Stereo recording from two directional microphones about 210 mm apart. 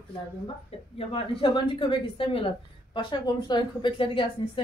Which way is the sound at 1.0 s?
25° left (ahead or behind).